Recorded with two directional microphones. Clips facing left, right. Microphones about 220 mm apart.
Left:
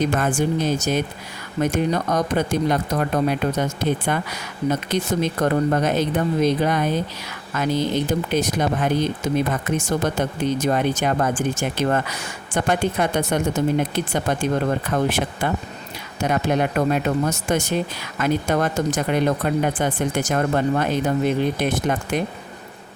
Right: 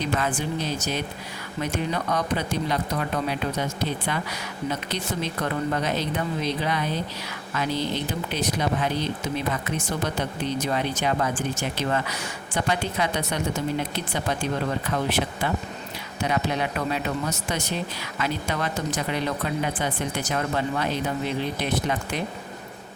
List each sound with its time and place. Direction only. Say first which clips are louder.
0.0 s speech: left 6 dB; 45° left (ahead or behind)